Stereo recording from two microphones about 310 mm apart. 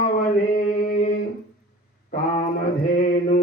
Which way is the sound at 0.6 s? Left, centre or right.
Left.